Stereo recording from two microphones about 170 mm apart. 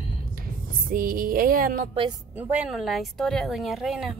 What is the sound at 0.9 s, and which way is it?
Music, 60° right (ahead or behind).